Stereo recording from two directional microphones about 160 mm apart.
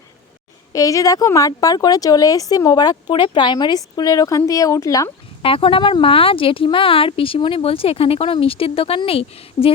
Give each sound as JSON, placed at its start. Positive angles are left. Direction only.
{"t": 0.7, "sound": "speech", "side_deg": 20}
{"t": 5.4, "sound": "speech", "side_deg": 35}